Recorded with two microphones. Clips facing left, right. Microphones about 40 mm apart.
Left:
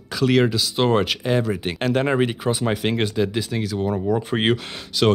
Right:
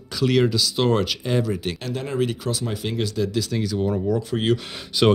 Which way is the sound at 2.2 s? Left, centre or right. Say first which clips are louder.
Left 3 dB; left.